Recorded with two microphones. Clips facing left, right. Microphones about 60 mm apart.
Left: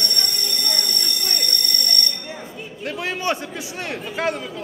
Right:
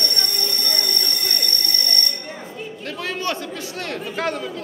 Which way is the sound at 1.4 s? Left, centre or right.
Right.